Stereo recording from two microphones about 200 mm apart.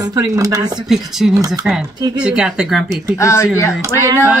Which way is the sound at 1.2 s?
5° right (ahead or behind).